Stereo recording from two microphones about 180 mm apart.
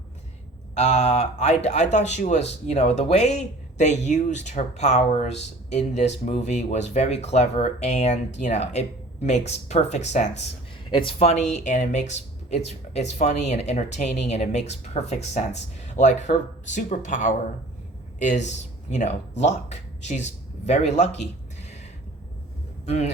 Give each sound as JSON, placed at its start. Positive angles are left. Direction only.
{"t": 0.7, "sound": "a man's voice", "side_deg": 40}
{"t": 22.9, "sound": "speech", "side_deg": 35}